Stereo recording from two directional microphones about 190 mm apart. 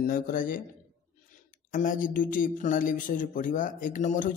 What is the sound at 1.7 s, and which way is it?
A man's voice, 45° left (ahead or behind).